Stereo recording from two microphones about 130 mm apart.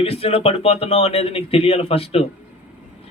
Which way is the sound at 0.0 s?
50° left (ahead or behind).